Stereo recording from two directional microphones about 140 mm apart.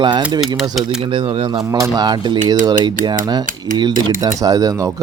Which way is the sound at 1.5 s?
25° right (ahead or behind).